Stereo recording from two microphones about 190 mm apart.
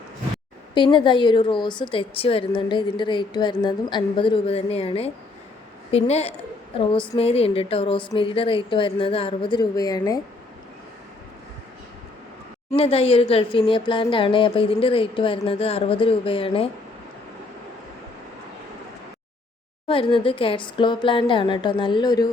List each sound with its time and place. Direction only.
0.7 s a woman's voice: 25° left (ahead or behind)
12.7 s a woman's voice: 30° left (ahead or behind)
19.9 s a woman's voice: 25° left (ahead or behind)